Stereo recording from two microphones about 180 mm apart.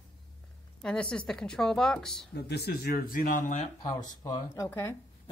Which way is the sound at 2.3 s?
65° left (ahead or behind).